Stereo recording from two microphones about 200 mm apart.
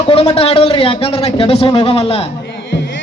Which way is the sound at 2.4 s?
65° left (ahead or behind).